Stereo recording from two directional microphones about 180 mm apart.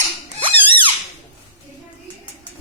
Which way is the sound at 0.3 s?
30° right (ahead or behind).